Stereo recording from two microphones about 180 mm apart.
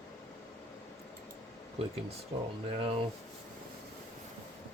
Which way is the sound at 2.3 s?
35° right (ahead or behind).